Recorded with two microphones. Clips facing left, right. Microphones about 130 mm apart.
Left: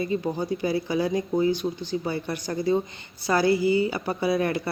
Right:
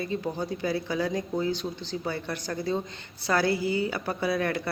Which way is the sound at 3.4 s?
55° right (ahead or behind).